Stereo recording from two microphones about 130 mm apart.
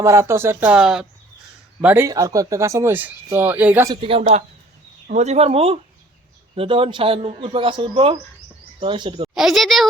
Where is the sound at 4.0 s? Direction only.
45° right (ahead or behind).